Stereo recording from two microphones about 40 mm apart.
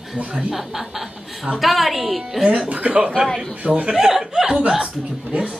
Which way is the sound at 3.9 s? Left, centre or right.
Centre.